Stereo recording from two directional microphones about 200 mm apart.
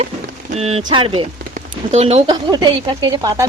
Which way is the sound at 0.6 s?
25° right (ahead or behind).